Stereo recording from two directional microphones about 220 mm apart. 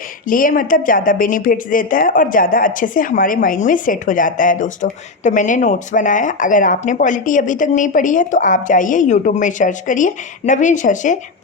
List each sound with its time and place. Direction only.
0.3 s a woman's voice: 40° left (ahead or behind)